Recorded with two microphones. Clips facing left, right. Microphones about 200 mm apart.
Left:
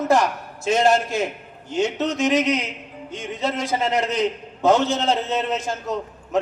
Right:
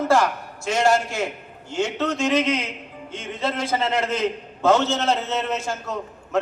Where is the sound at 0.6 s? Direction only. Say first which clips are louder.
Left 2 dB; 20° left (ahead or behind).